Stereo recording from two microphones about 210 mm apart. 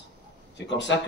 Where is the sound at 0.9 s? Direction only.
60° left (ahead or behind).